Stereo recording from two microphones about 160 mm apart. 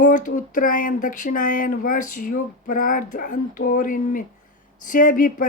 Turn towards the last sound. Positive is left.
turn(degrees=55)  # may be behind; listen again after turning